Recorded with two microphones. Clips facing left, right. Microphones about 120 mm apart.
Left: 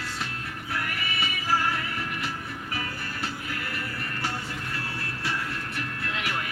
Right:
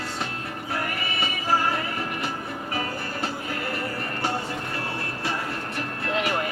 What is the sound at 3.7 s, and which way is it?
Music, 25° right (ahead or behind).